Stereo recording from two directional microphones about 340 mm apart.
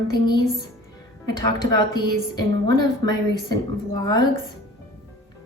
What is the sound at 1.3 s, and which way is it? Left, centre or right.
A woman's voice, centre.